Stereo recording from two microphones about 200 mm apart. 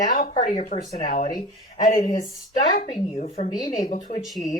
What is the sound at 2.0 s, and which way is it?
Speech, 35° left (ahead or behind).